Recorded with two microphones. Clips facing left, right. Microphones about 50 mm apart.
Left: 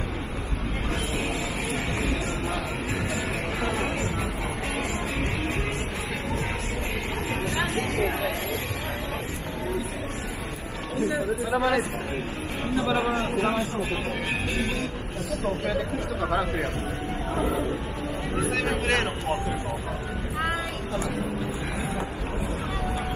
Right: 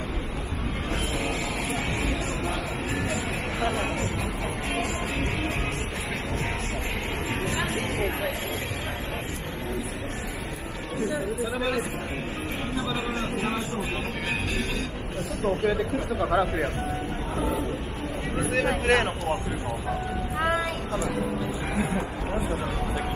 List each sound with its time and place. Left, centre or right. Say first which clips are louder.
7.4 s a sound: left 2 dB; right
11.1 s a sound: left 2 dB; left
13.1 s a man's voice: left 3 dB; centre
15.7 s speech: right 1 dB; centre
18.4 s speech: right 2 dB; centre
20.3 s vehicle: right 3 dB; centre